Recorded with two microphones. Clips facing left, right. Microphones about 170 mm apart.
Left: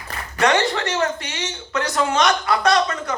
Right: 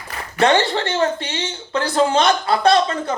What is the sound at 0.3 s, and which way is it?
Speech, 30° right (ahead or behind).